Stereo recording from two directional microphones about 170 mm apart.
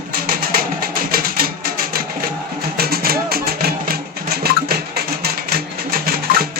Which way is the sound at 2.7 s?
65° right (ahead or behind).